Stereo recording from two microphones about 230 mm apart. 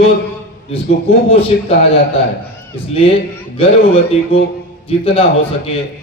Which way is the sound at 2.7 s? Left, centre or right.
Left.